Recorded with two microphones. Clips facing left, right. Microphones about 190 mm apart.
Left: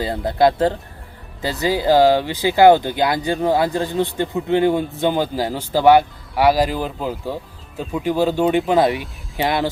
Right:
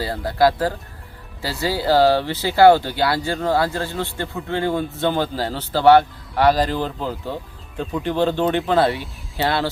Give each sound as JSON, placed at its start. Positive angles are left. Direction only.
{"t": 0.0, "sound": "speech", "side_deg": 20}